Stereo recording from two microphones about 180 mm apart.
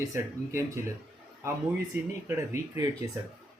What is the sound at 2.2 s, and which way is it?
Speech, 15° right (ahead or behind).